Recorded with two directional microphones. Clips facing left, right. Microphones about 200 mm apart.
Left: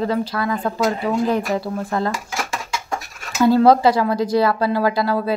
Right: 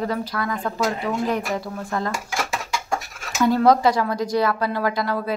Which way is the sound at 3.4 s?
30° left (ahead or behind).